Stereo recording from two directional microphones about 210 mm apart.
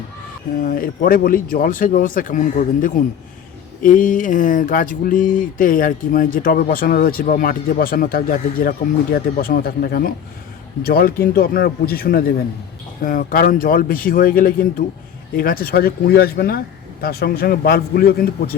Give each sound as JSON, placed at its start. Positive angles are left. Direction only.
{"t": 0.6, "sound": "a man's voice", "side_deg": 40}